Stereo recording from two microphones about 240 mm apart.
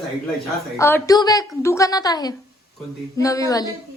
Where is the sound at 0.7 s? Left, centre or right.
Centre.